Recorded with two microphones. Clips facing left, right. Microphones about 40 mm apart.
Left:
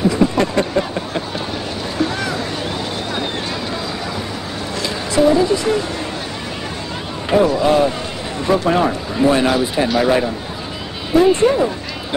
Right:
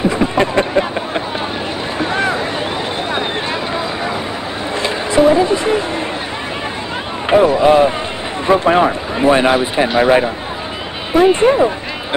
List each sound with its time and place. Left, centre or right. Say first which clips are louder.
0.1 s a sound: right 1 dB; right
4.7 s music: right 3 dB; right
7.2 s speech: right 4 dB; right